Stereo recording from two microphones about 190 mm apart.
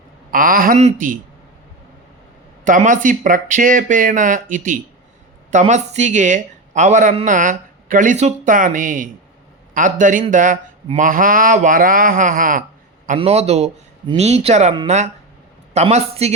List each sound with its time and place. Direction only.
0.3 s speech: 45° right (ahead or behind)
2.6 s a man's voice: 40° right (ahead or behind)
13.1 s a man's voice: 30° right (ahead or behind)